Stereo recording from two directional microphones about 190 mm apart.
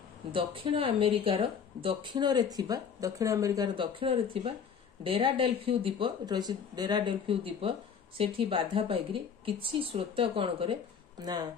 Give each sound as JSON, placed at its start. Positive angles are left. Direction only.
{"t": 0.3, "sound": "speech", "side_deg": -25}